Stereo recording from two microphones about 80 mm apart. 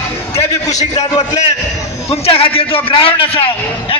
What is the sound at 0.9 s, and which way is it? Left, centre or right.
Speech, left.